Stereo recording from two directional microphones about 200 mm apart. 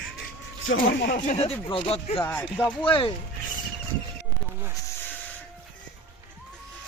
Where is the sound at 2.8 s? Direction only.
25° left (ahead or behind).